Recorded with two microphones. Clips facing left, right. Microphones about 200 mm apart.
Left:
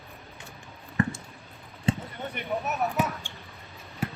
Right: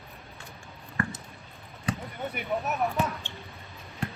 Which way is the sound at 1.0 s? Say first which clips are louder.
Left 5 dB; 20° left (ahead or behind).